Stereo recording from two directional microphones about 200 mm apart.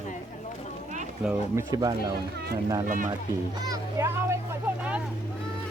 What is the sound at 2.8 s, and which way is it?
Speech, 40° right (ahead or behind).